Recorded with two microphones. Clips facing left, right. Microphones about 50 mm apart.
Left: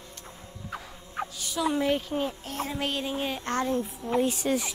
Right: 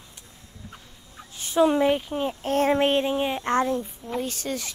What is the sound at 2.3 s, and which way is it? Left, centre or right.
Speech, right.